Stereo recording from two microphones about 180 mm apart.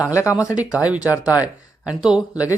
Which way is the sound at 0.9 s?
5° right (ahead or behind).